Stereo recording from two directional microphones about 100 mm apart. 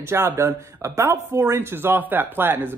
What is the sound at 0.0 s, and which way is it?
Speech, 30° right (ahead or behind).